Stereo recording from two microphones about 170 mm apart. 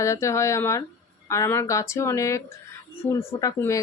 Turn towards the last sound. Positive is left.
turn(degrees=20)  # may be behind; listen again after turning